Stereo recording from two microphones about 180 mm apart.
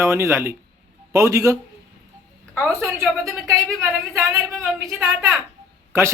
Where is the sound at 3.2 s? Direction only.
15° right (ahead or behind).